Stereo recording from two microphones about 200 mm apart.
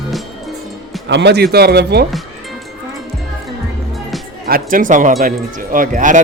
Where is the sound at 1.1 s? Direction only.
60° right (ahead or behind).